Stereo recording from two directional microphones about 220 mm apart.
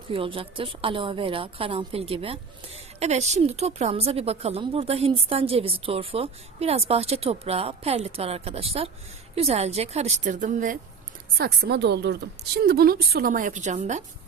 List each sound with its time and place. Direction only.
0.1 s a woman's voice: 25° right (ahead or behind)